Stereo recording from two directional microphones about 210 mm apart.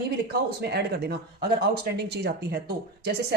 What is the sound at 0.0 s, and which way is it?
Speech, 50° right (ahead or behind).